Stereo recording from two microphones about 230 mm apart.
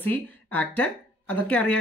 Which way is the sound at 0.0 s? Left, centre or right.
Centre.